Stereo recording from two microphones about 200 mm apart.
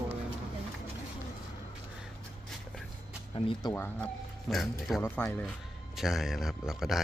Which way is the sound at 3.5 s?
20° left (ahead or behind).